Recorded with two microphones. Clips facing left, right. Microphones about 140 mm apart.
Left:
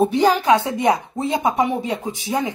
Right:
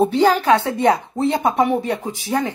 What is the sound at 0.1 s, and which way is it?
Speech, 15° left (ahead or behind).